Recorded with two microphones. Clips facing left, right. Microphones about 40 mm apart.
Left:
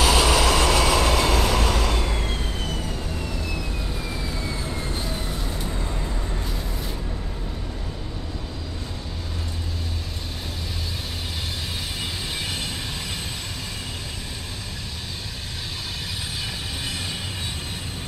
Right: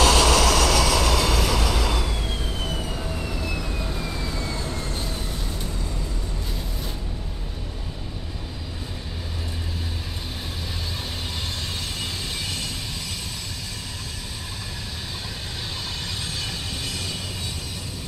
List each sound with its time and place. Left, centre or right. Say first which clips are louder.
0.0 s train: right 1 dB; centre
1.5 s vehicle: left 1 dB; left
2.6 s vehicle: even; centre
5.7 s vehicle: left 2 dB; left